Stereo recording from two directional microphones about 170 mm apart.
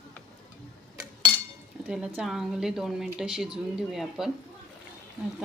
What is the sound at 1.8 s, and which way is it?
A woman's voice, 5° right (ahead or behind).